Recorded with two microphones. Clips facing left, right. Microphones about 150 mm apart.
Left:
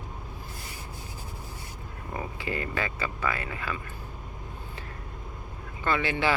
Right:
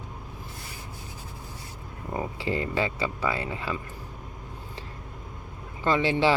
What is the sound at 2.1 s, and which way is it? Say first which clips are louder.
Speech: right 4 dB; 25° right (ahead or behind).